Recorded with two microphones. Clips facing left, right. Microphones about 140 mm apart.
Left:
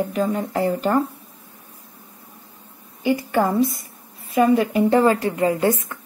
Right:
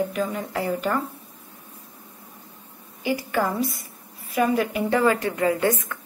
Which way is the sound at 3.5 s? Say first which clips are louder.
Left 6 dB; 25° left (ahead or behind).